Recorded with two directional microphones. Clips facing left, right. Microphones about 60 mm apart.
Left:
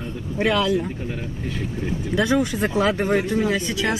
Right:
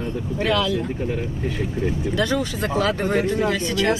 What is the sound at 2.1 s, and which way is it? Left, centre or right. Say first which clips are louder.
Speech: left 5 dB; centre.